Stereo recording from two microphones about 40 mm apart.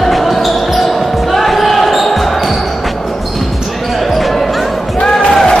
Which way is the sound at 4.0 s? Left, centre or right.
Centre.